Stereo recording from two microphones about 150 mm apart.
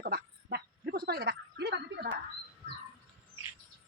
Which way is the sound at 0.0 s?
90° right.